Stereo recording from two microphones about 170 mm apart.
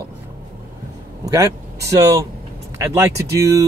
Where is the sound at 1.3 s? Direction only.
20° right (ahead or behind).